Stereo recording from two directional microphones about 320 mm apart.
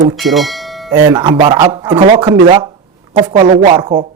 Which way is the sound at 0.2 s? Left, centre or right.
Centre.